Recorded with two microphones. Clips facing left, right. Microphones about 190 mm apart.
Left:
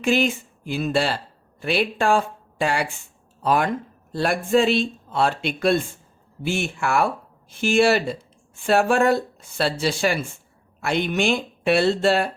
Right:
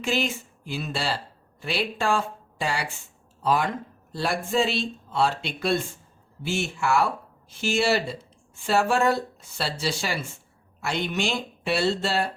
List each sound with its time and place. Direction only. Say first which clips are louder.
0.0 s speech: left 6 dB; 55° left (ahead or behind)